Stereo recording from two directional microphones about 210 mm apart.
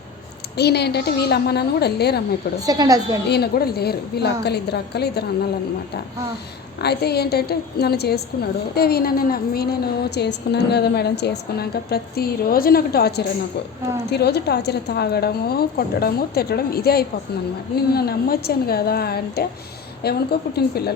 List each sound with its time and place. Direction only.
0.5 s a woman's voice: 50° left (ahead or behind)
2.6 s a woman's voice: 15° right (ahead or behind)
3.2 s a woman's voice: 50° left (ahead or behind)
6.8 s a woman's voice: 50° left (ahead or behind)